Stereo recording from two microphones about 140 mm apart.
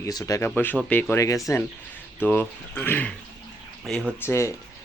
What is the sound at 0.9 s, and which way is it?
Speech, 15° left (ahead or behind).